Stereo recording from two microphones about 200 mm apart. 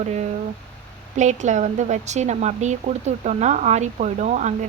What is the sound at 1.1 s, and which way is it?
A woman's voice, 35° right (ahead or behind).